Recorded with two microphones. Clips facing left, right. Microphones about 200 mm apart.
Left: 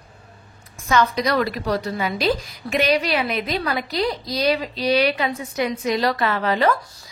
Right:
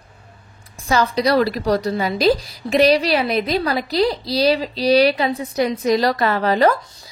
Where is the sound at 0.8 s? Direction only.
35° right (ahead or behind).